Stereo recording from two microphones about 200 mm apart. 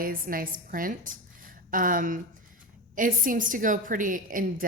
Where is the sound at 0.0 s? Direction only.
45° right (ahead or behind).